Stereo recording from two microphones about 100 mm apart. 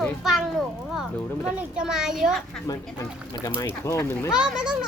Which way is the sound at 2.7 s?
35° left (ahead or behind).